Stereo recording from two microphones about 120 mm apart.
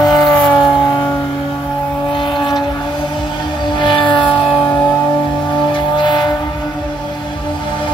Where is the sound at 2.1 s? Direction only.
40° left (ahead or behind).